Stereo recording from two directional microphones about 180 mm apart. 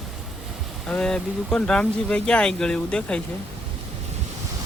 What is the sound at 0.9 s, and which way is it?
Speech, 5° left (ahead or behind).